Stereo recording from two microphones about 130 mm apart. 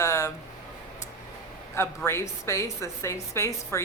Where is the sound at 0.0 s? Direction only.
20° left (ahead or behind).